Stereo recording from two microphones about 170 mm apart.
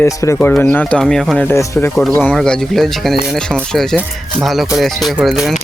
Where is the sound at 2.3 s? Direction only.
5° left (ahead or behind).